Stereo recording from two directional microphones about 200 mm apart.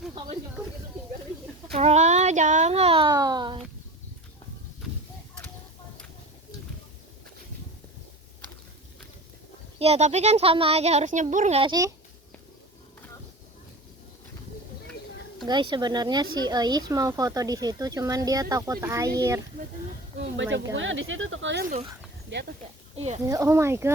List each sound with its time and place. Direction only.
1.7 s speech: 35° right (ahead or behind)
9.7 s speech: 30° right (ahead or behind)
11.7 s speech: 15° right (ahead or behind)
15.4 s speech: 20° right (ahead or behind)
20.1 s speech: 60° right (ahead or behind)
23.0 s speech: 35° right (ahead or behind)
23.2 s speech: 15° right (ahead or behind)